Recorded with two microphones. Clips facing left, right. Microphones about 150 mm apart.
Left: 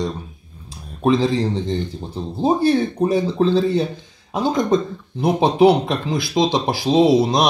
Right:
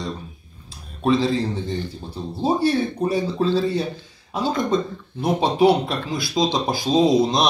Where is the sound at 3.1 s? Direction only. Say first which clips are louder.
Left 4 dB; 20° left (ahead or behind).